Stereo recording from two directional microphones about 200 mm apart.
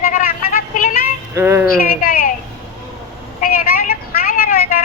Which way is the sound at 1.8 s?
45° left (ahead or behind).